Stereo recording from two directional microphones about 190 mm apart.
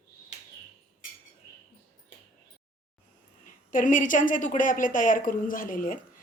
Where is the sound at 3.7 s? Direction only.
45° left (ahead or behind).